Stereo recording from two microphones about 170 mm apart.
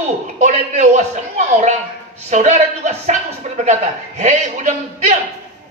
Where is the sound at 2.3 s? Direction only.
45° right (ahead or behind).